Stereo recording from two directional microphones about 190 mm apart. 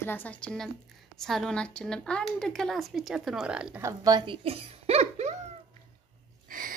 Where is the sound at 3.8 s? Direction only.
20° right (ahead or behind).